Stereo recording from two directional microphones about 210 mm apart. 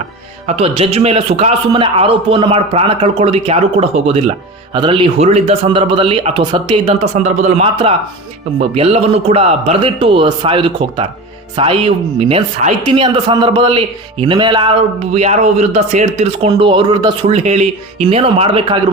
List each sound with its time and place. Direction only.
0.4 s a man's voice: 30° right (ahead or behind)
17.3 s a man's voice: 30° right (ahead or behind)